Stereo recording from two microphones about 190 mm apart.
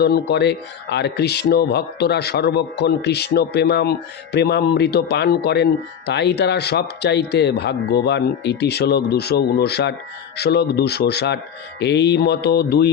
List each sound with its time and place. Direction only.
0.0 s speech: 60° left (ahead or behind)